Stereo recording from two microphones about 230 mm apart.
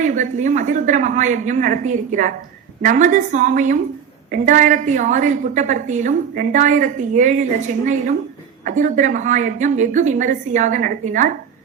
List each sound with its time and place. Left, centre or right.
0.0 s a woman's voice: right
8.6 s a woman's voice: right